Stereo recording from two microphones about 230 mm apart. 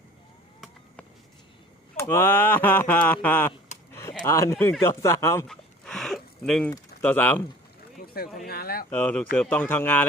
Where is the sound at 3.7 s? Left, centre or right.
Left.